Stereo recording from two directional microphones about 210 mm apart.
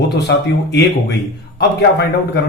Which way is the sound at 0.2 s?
50° left (ahead or behind).